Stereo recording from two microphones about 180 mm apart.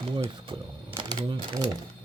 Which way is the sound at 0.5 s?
30° right (ahead or behind).